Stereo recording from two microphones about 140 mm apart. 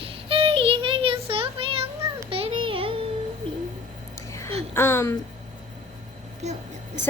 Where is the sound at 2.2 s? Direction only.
40° right (ahead or behind).